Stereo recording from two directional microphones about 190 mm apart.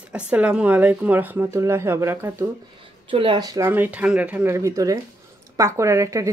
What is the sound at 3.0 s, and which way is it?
Speech, 25° right (ahead or behind).